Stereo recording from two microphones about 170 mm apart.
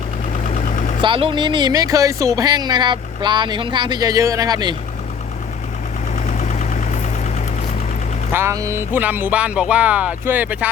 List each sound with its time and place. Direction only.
1.0 s speech: 30° right (ahead or behind)
6.2 s engine: 40° left (ahead or behind)
8.3 s speech: 15° right (ahead or behind)